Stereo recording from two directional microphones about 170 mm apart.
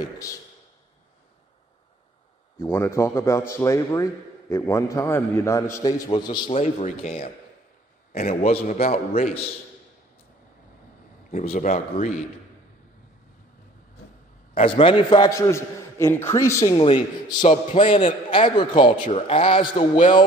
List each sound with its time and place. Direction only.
0.0 s a man's voice: 20° left (ahead or behind)
2.6 s a man's voice: 15° left (ahead or behind)
6.5 s a man's voice: 40° left (ahead or behind)
8.4 s a man's voice: 35° left (ahead or behind)
11.5 s speech: 50° left (ahead or behind)
14.6 s a man's voice: 30° left (ahead or behind); by 16.7 s 15° left (ahead or behind)
16.7 s a man's voice: 30° left (ahead or behind)